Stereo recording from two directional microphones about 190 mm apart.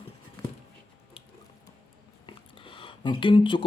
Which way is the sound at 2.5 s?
25° left (ahead or behind).